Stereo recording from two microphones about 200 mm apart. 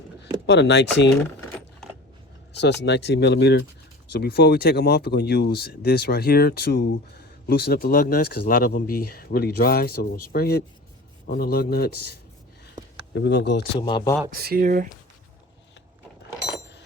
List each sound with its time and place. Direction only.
0.4 s speech: 60° left (ahead or behind)
2.5 s speech: 60° left (ahead or behind)
13.1 s speech: 60° left (ahead or behind)
13.7 s speech: 20° left (ahead or behind)
14.3 s speech: 45° right (ahead or behind)